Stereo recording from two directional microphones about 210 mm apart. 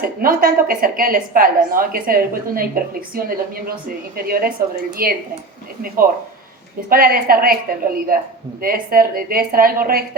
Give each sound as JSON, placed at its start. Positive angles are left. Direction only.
{"t": 0.2, "sound": "a woman's voice", "side_deg": -40}
{"t": 6.9, "sound": "a woman's voice", "side_deg": -45}